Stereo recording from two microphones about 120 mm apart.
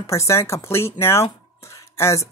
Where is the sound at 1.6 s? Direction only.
25° left (ahead or behind).